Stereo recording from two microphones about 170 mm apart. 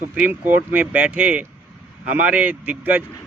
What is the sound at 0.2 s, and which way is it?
Speech, 10° right (ahead or behind).